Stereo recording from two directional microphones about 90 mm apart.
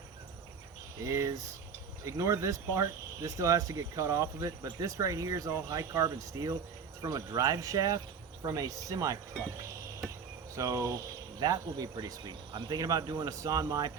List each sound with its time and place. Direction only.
1.0 s speech: 35° right (ahead or behind)
10.5 s speech: 35° right (ahead or behind)